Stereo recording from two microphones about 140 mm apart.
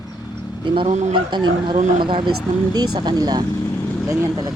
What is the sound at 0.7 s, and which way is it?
Speech, 35° right (ahead or behind).